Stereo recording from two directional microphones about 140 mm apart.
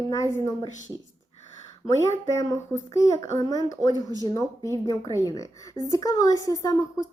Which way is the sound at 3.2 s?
25° left (ahead or behind).